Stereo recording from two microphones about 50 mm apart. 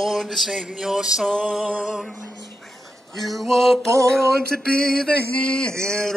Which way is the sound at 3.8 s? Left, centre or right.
Right.